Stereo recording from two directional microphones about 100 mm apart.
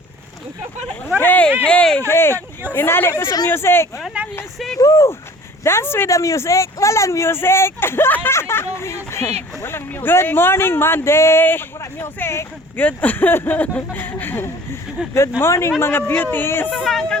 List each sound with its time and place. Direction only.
1.2 s a sound: 15° left (ahead or behind)
1.6 s speech: 10° left (ahead or behind)
2.0 s speech: 25° left (ahead or behind)
3.2 s speech: 40° left (ahead or behind)
3.5 s speech: 25° left (ahead or behind)
16.7 s speech: centre (ahead or behind)